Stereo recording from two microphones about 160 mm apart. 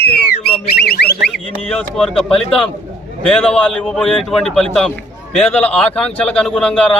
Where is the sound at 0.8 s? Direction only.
80° left.